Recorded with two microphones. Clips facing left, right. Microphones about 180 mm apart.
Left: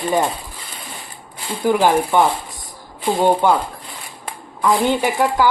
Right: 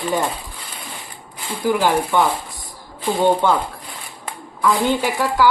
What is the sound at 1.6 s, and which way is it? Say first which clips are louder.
Speech: left 2 dB; 15° left (ahead or behind).